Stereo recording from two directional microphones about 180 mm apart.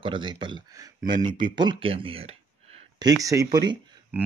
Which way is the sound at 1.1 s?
50° right (ahead or behind).